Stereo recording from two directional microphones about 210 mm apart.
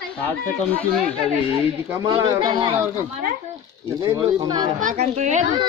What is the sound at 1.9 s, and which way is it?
Speech, 20° right (ahead or behind).